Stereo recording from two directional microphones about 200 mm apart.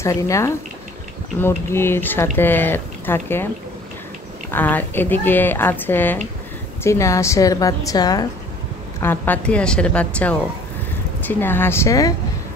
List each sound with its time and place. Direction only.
0.0 s speech: 15° left (ahead or behind)
4.5 s speech: 10° left (ahead or behind)